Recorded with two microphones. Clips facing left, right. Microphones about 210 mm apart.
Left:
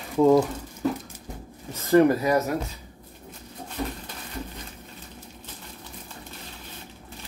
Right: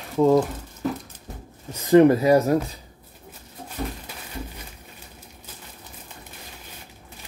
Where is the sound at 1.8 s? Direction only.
25° right (ahead or behind).